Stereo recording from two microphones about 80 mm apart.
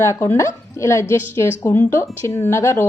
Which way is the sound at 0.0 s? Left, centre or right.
Left.